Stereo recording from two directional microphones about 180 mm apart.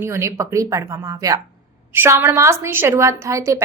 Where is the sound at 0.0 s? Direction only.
15° right (ahead or behind).